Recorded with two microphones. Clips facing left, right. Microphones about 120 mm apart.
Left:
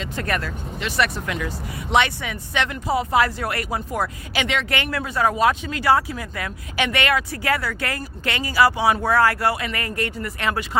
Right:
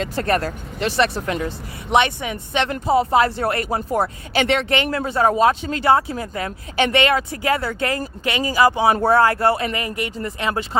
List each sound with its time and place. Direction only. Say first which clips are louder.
0.0 s speech: right 6 dB; 35° right (ahead or behind)
0.9 s speech: right 3 dB; 30° right (ahead or behind)
1.9 s speech: right 2 dB; 20° right (ahead or behind); by 4.6 s 35° right (ahead or behind)
4.7 s speech: right 4 dB; 25° right (ahead or behind)